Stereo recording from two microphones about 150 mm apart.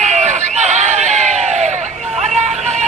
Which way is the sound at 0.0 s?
50° right (ahead or behind).